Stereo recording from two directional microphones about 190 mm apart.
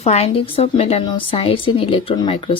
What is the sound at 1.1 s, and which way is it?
Speech, 30° left (ahead or behind).